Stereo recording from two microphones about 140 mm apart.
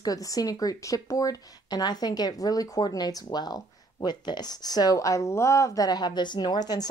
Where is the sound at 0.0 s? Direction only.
25° left (ahead or behind).